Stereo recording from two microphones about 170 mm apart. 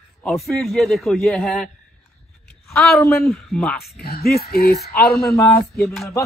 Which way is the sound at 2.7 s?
15° left (ahead or behind).